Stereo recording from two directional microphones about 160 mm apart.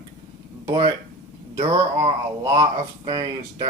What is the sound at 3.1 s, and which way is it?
Speech, 25° right (ahead or behind).